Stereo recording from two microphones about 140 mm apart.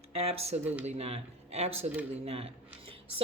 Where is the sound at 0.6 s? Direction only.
10° right (ahead or behind).